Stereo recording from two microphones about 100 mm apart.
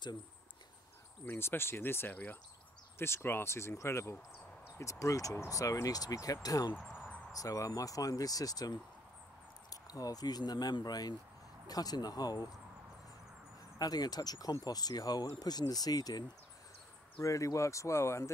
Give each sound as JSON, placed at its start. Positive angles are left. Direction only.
{"t": 1.2, "sound": "speech", "side_deg": 20}
{"t": 6.8, "sound": "a sound", "side_deg": -5}
{"t": 7.3, "sound": "speech", "side_deg": 35}
{"t": 13.7, "sound": "speech", "side_deg": 40}